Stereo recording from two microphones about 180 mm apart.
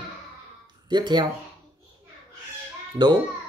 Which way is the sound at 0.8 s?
25° right (ahead or behind).